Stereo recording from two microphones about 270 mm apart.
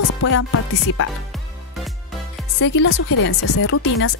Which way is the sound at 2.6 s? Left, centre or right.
Left.